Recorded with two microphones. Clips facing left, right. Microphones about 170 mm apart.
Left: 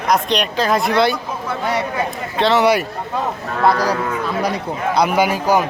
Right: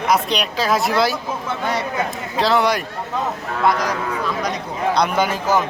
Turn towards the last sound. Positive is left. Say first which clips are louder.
# left 3 dB
turn(degrees=10)  # may be behind; listen again after turning